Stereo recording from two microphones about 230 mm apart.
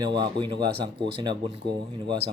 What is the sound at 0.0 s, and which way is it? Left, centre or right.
Speech, centre.